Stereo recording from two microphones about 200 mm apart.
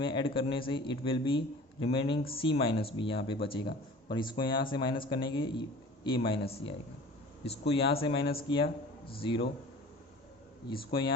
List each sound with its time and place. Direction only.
0.0 s a man's voice: 25° left (ahead or behind)
10.7 s speech: 25° left (ahead or behind)